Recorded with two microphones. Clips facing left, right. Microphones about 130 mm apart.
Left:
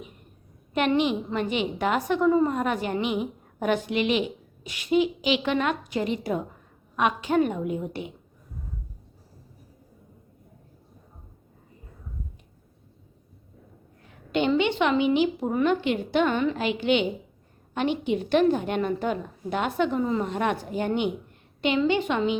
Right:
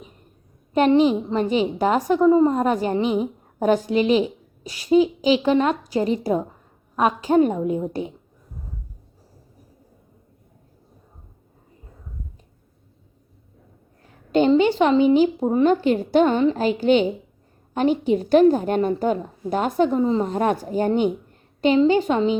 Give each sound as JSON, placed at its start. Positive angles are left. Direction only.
{"t": 0.7, "sound": "a woman's voice", "side_deg": -35}
{"t": 14.3, "sound": "a woman's voice", "side_deg": -40}